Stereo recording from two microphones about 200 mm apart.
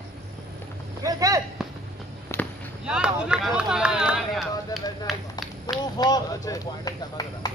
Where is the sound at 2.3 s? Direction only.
10° left (ahead or behind).